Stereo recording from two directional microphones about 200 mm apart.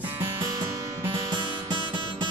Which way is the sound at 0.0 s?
15° right (ahead or behind).